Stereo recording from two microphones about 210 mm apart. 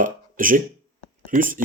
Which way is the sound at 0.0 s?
40° right (ahead or behind).